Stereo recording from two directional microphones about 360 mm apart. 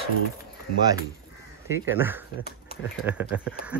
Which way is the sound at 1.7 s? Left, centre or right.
Centre.